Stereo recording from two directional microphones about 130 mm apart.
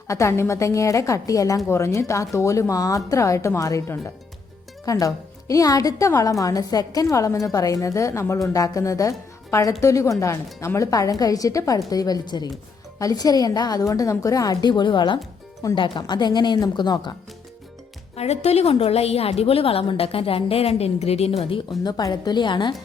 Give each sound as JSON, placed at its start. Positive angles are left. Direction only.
{"t": 0.1, "sound": "a woman's voice", "side_deg": 20}
{"t": 18.2, "sound": "a woman's voice", "side_deg": 55}
{"t": 21.8, "sound": "a woman's voice", "side_deg": 30}